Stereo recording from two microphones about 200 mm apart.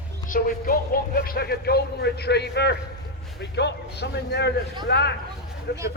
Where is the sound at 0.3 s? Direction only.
45° left (ahead or behind).